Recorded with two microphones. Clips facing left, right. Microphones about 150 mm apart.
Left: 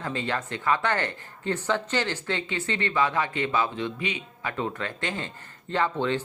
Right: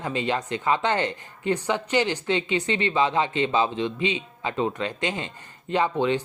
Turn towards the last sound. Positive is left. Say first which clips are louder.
# right 3 dB
turn(degrees=-15)  # may be behind; listen again after turning